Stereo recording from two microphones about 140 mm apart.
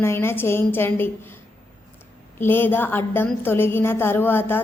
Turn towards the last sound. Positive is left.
turn(degrees=15)  # may be behind; listen again after turning